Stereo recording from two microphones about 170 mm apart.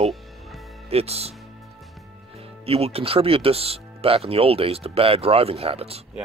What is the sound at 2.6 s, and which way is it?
Speech, 35° right (ahead or behind).